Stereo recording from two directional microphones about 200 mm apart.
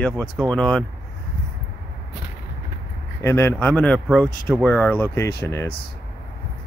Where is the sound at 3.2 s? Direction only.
15° left (ahead or behind).